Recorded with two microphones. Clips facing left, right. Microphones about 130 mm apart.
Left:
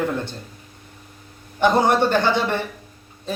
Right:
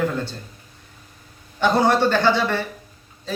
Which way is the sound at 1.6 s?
15° left (ahead or behind).